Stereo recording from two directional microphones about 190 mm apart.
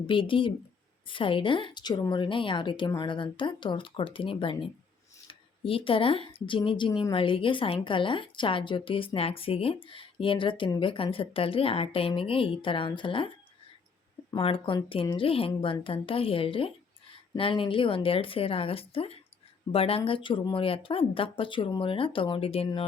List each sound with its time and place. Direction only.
0.1 s a woman's voice: 25° left (ahead or behind)